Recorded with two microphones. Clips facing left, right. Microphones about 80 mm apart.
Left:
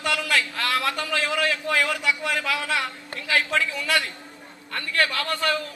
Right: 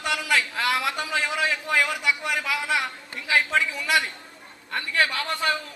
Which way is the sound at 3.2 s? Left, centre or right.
Centre.